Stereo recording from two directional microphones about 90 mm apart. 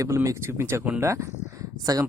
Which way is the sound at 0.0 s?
35° right (ahead or behind).